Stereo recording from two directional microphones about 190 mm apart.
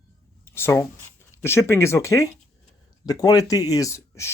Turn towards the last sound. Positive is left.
turn(degrees=15)  # may be behind; listen again after turning